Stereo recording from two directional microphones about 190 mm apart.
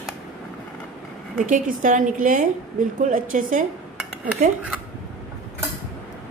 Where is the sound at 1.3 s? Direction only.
45° right (ahead or behind).